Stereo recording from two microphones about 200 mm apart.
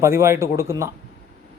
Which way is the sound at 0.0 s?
15° right (ahead or behind).